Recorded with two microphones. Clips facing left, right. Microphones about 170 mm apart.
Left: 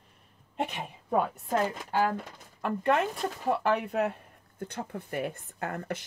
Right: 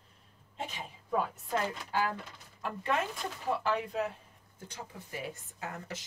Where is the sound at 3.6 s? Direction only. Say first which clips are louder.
Left 6 dB; 60° left (ahead or behind).